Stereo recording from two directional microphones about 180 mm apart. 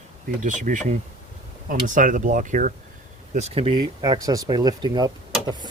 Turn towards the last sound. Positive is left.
turn(degrees=-25)  # may be behind; listen again after turning